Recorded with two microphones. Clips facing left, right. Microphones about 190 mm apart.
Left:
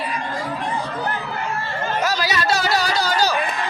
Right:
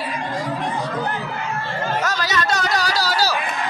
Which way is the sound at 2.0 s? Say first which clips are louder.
Left 1 dB; 10° left (ahead or behind).